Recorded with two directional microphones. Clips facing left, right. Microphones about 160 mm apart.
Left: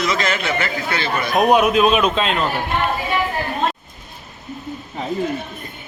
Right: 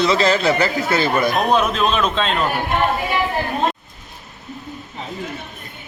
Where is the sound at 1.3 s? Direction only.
15° left (ahead or behind).